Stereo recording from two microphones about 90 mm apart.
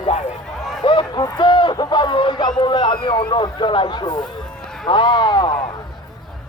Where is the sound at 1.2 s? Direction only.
50° left (ahead or behind).